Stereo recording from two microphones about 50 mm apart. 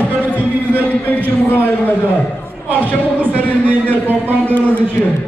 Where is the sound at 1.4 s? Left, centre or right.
Left.